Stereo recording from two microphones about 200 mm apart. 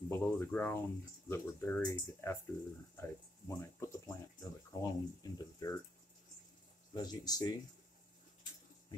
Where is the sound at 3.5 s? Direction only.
15° left (ahead or behind).